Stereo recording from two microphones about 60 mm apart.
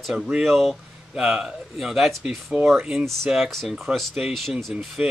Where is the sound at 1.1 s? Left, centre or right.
Centre.